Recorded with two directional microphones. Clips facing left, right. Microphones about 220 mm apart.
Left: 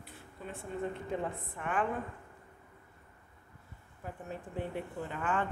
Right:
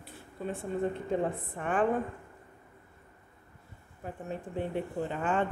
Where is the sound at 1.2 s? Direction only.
35° right (ahead or behind).